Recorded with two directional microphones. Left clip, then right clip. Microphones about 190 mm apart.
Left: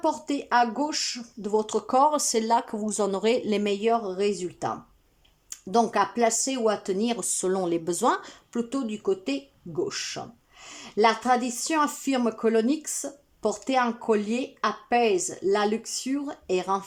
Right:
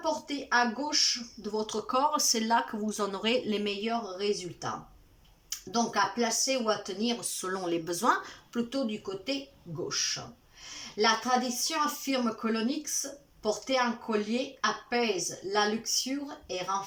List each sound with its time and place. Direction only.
0.0 s speech: 35° left (ahead or behind)
10.9 s speech: 40° left (ahead or behind)